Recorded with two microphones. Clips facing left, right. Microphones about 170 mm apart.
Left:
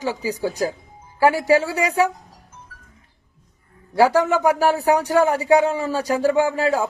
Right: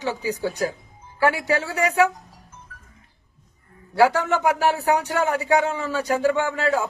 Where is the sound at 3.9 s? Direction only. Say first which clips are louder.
Left 2 dB; 15° left (ahead or behind).